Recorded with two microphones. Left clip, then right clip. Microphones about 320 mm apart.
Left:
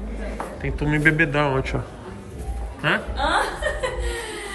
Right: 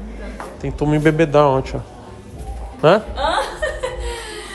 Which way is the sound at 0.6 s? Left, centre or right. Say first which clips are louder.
Right 4 dB; centre.